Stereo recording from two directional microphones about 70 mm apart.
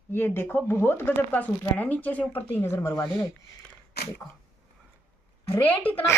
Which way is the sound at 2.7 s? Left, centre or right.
Left.